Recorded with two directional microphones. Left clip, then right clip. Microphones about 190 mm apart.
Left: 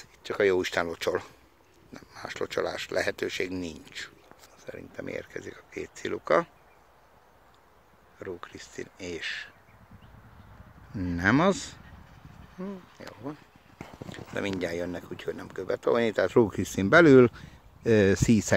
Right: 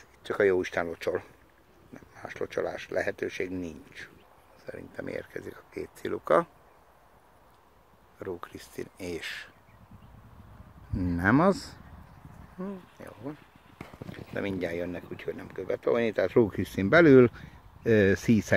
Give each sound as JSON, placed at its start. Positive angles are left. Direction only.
{"t": 0.2, "sound": "a sound", "side_deg": -10}
{"t": 0.5, "sound": "speech", "side_deg": 10}
{"t": 8.2, "sound": "speech", "side_deg": -10}
{"t": 10.9, "sound": "speech", "side_deg": -10}
{"t": 12.5, "sound": "speech", "side_deg": 5}
{"t": 13.7, "sound": "a sound", "side_deg": 45}
{"t": 14.3, "sound": "speech", "side_deg": 5}